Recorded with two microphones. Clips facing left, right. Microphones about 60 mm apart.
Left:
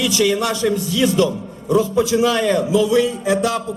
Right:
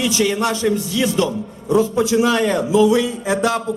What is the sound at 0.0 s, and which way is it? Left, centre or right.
A man's voice, right.